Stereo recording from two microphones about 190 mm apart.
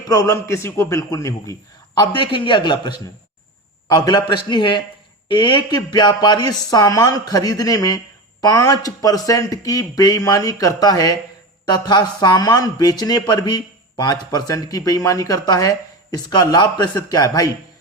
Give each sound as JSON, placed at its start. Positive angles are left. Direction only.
{"t": 0.1, "sound": "a man's voice", "side_deg": 15}